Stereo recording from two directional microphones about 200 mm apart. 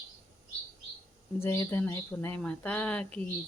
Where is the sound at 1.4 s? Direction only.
15° left (ahead or behind).